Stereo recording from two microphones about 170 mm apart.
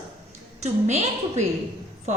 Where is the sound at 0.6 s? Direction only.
40° right (ahead or behind).